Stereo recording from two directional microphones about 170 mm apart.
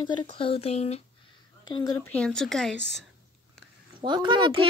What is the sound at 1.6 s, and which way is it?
Speech, 25° left (ahead or behind).